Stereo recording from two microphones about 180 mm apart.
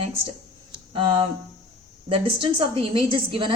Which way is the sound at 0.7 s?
25° right (ahead or behind).